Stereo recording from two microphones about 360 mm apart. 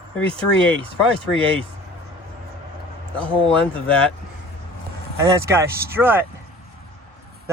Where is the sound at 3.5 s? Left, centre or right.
Centre.